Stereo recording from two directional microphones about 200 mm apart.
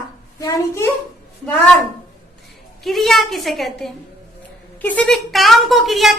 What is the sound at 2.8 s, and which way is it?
A woman's voice, centre (ahead or behind).